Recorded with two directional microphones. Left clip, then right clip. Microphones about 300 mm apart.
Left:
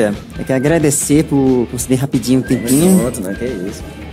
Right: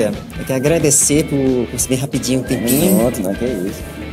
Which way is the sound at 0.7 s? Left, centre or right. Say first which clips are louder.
Even; left.